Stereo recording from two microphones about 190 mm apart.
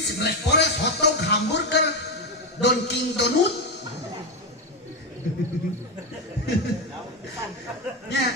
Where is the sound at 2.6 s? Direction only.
65° left (ahead or behind).